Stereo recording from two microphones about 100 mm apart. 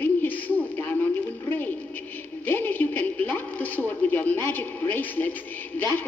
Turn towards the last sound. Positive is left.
turn(degrees=20)  # may be behind; listen again after turning